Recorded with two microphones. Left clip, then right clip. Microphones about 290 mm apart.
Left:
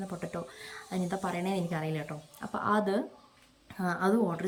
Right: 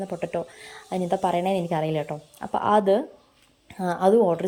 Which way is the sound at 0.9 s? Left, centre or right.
Centre.